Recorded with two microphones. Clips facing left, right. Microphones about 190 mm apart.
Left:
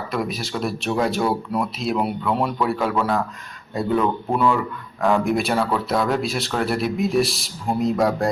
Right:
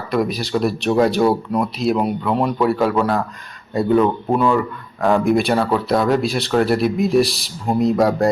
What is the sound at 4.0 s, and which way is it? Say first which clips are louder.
Speech: right 3 dB; 15° right (ahead or behind).